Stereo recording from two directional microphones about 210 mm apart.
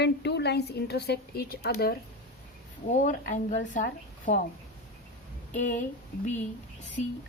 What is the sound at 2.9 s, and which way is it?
A woman's voice, 35° left (ahead or behind).